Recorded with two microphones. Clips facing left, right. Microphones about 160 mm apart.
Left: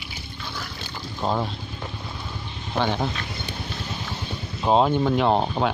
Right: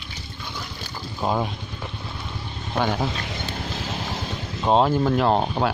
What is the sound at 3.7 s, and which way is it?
Music, 90° right.